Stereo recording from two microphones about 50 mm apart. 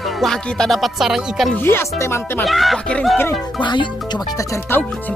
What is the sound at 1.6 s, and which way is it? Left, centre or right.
Speech, left.